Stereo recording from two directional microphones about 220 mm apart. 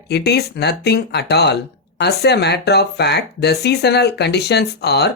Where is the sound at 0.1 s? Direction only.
50° left (ahead or behind).